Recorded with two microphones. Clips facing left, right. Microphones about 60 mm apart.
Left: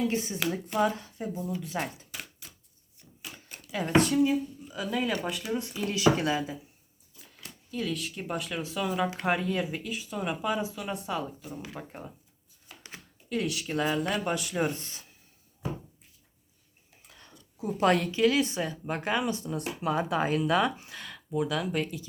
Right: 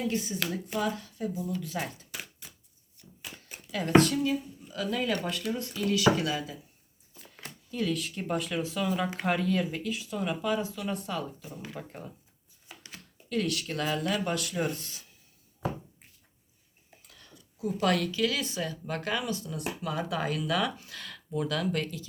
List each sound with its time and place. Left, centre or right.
0.1 s speech: left
2.4 s chopping: centre
3.7 s speech: centre
5.8 s speech: left
7.2 s a sound: centre
7.7 s speech: centre
12.7 s a sound: centre
13.3 s speech: centre
14.8 s speech: left
17.1 s a sound: left
17.7 s speech: left; by 22.0 s centre